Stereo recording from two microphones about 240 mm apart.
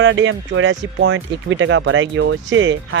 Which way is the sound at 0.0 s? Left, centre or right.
Right.